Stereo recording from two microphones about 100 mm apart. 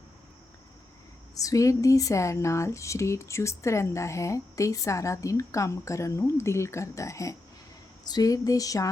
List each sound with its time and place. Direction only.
1.4 s speech: 35° left (ahead or behind)